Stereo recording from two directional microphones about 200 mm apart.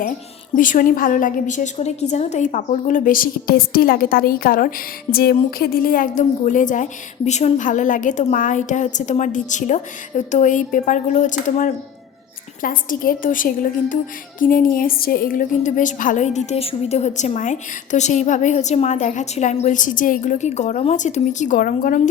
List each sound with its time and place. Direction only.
0.5 s a woman's voice: 40° left (ahead or behind)